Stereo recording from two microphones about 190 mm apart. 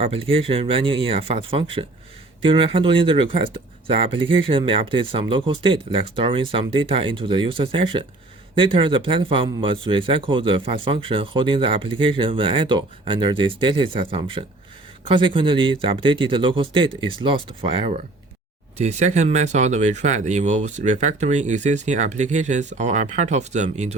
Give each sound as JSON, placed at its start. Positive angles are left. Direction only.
{"t": 0.0, "sound": "speech", "side_deg": -30}